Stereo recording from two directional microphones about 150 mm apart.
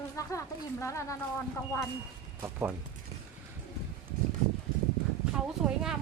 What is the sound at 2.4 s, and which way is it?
Speech, 10° right (ahead or behind).